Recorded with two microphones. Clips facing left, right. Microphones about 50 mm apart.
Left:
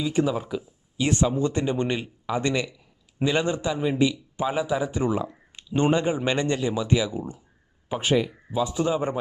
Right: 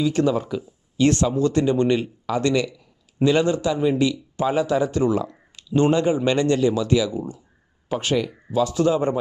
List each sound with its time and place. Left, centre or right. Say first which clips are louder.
0.0 s speech: right 4 dB; centre
7.9 s speech: right 1 dB; centre